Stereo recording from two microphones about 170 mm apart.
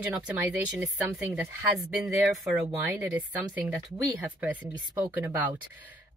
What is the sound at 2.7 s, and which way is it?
Speech, 10° right (ahead or behind).